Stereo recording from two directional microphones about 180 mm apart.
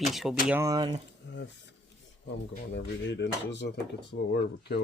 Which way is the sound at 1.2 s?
90° left.